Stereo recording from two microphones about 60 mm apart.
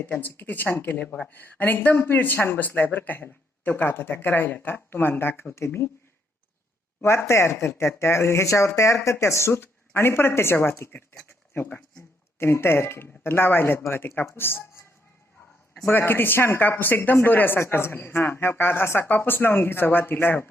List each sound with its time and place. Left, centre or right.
0.0 s speech: left
7.0 s speech: left
15.9 s speech: left